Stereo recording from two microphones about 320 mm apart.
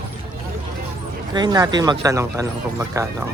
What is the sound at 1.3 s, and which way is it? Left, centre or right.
Speech, centre.